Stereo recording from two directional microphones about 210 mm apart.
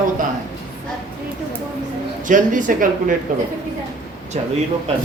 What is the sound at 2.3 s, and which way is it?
Speech, 40° right (ahead or behind).